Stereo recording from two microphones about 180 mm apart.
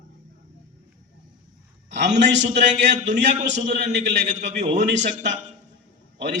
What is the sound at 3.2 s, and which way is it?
A man's voice, 40° right (ahead or behind).